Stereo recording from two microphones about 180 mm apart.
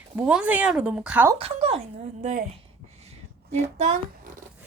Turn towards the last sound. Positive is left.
turn(degrees=-40)  # may be behind; listen again after turning